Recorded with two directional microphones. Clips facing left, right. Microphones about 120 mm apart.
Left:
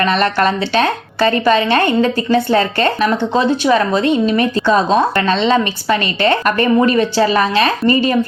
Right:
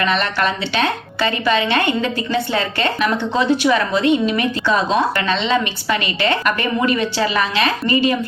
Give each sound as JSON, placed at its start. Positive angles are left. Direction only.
{"t": 0.0, "sound": "a woman's voice", "side_deg": 40}